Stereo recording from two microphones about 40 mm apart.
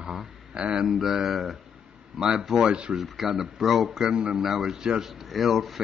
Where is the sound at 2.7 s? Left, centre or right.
Right.